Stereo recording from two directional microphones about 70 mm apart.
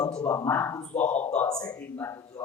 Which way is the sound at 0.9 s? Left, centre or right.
Left.